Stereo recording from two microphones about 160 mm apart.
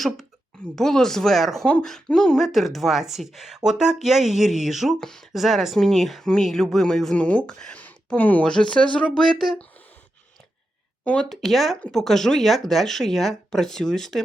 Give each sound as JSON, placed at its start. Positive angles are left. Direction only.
{"t": 0.8, "sound": "speech", "side_deg": 5}
{"t": 11.0, "sound": "speech", "side_deg": 5}